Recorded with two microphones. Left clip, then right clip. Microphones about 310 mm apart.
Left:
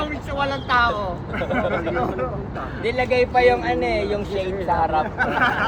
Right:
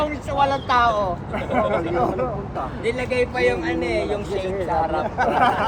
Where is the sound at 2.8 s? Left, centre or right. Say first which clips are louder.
Left 3 dB; centre.